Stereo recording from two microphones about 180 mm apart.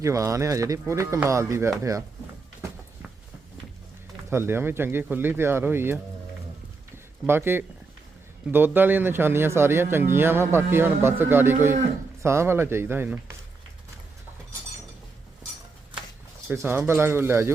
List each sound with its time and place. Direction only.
0.0 s speech: 15° right (ahead or behind)
4.3 s speech: 15° right (ahead or behind)
6.9 s a sound: 15° right (ahead or behind)
8.4 s speech: 10° right (ahead or behind)
16.5 s speech: 10° right (ahead or behind)